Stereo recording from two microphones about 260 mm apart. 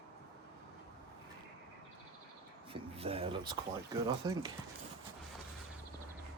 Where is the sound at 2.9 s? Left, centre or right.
Right.